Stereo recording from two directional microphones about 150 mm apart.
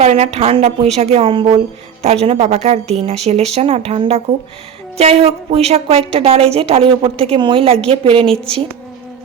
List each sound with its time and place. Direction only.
0.0 s a woman's voice: 40° right (ahead or behind)